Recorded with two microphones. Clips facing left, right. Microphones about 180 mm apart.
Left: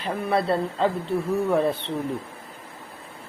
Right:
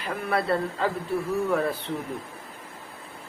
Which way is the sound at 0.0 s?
25° left (ahead or behind).